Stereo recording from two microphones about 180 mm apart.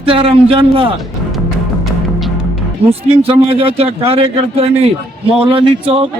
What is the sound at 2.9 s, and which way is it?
Speech, 35° right (ahead or behind).